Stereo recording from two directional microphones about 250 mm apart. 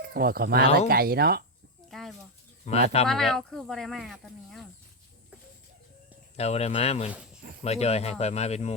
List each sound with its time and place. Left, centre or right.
0.1 s speech: right
1.9 s a sound: centre
2.6 s speech: left
3.1 s speech: centre
6.3 s speech: left